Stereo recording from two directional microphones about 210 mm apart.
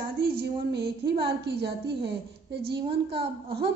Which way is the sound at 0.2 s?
50° right (ahead or behind).